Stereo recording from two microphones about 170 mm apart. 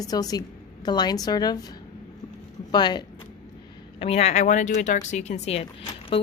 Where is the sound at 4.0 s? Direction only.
40° left (ahead or behind).